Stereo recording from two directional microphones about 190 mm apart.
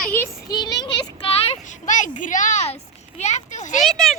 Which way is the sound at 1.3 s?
35° left (ahead or behind).